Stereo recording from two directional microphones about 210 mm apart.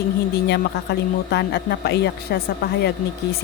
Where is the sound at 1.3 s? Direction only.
50° left (ahead or behind).